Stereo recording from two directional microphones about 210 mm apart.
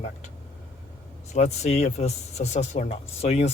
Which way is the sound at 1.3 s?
30° left (ahead or behind).